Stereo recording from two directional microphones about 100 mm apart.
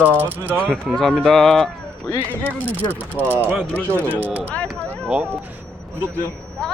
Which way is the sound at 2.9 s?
20° right (ahead or behind).